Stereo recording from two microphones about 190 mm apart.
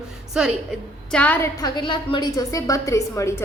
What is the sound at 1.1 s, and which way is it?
Speech, 10° left (ahead or behind).